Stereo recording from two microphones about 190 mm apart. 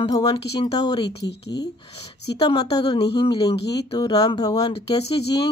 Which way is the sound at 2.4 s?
25° left (ahead or behind).